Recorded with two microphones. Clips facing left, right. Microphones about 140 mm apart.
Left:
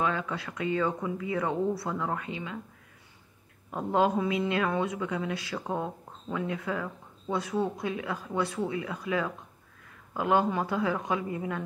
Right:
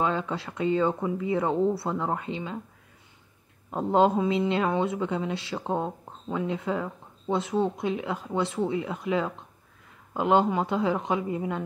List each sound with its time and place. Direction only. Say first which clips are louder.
0.0 s speech: right 3 dB; 25° right (ahead or behind)
3.7 s speech: right 4 dB; 25° right (ahead or behind)